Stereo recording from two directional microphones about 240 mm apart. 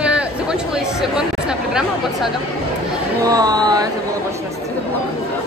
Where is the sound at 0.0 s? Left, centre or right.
Centre.